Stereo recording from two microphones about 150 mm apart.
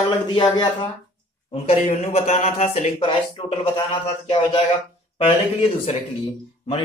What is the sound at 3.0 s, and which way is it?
A man's voice, 35° left (ahead or behind).